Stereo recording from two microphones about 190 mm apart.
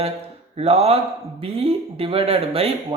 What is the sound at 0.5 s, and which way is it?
Speech, 35° right (ahead or behind).